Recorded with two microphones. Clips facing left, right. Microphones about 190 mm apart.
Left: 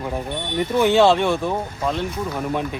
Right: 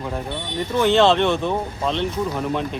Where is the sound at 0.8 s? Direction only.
15° left (ahead or behind).